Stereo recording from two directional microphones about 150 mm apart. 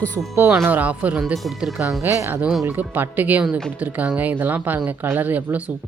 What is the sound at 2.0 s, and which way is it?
Speech, 20° right (ahead or behind).